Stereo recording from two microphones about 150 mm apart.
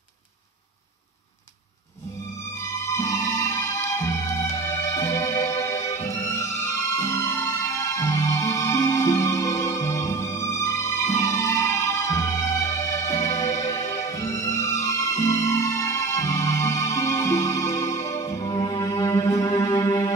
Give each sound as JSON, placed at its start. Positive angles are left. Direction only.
{"t": 2.6, "sound": "music", "side_deg": 20}